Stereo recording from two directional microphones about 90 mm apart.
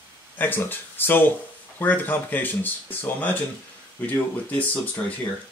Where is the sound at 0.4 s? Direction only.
20° left (ahead or behind).